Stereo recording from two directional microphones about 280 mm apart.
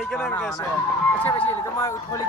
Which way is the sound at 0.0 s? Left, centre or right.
Centre.